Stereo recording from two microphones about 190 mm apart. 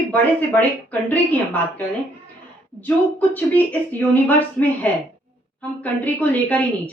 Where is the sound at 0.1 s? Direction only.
10° left (ahead or behind).